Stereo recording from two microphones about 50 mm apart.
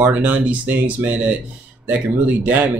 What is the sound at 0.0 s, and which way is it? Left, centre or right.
Speech, right.